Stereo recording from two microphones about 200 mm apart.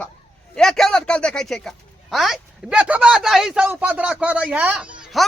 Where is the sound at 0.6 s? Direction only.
Centre (ahead or behind).